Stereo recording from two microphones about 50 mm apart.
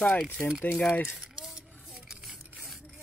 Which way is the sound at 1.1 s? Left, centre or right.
Centre.